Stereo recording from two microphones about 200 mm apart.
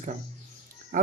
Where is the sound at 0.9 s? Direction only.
45° right (ahead or behind).